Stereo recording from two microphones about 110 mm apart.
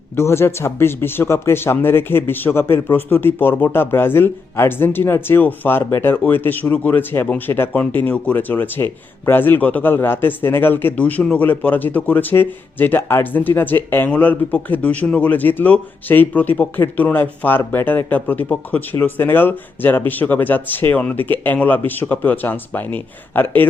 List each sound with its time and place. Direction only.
0.2 s speech: 25° left (ahead or behind)